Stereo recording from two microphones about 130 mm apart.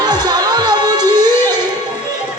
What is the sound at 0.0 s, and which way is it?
Music, 35° right (ahead or behind).